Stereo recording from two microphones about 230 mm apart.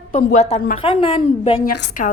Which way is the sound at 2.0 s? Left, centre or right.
Left.